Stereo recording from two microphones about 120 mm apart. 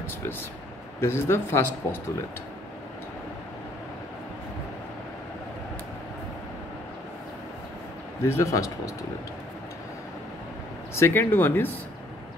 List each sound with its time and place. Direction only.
1.0 s speech: 20° left (ahead or behind)
8.3 s speech: 25° left (ahead or behind)
11.0 s speech: 20° left (ahead or behind)